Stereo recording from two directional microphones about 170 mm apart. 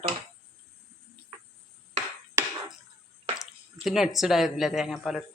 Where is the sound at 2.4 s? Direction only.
15° right (ahead or behind).